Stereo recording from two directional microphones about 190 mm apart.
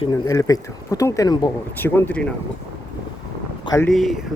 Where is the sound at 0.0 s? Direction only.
15° left (ahead or behind).